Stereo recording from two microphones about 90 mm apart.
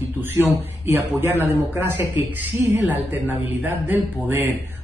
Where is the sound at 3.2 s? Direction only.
20° right (ahead or behind).